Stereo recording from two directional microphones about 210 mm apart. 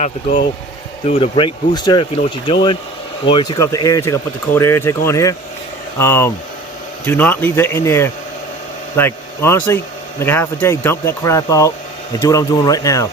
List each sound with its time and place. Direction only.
0.0 s speech: 40° left (ahead or behind)
1.0 s speech: 25° left (ahead or behind)